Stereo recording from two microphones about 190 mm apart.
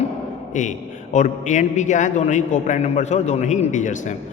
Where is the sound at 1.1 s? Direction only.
40° left (ahead or behind).